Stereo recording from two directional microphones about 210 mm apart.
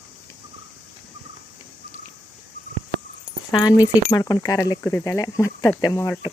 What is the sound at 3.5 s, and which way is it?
Speech, 20° left (ahead or behind).